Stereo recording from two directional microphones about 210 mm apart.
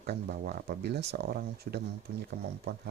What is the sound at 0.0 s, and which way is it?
Speech, 50° right (ahead or behind).